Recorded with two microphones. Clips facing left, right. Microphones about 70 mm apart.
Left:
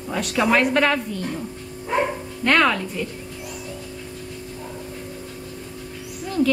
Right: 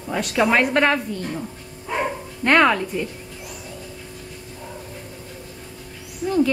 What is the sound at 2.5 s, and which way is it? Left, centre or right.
Speech, centre.